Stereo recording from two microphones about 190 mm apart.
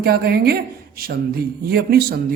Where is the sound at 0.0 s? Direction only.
55° right (ahead or behind).